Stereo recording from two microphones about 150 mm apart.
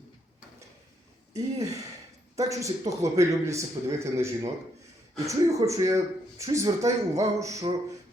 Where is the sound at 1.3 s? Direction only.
25° right (ahead or behind).